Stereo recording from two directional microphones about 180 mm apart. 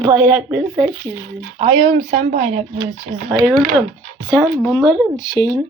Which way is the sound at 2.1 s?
40° right (ahead or behind).